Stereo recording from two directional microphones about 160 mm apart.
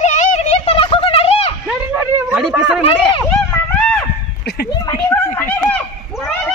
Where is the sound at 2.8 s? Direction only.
30° left (ahead or behind).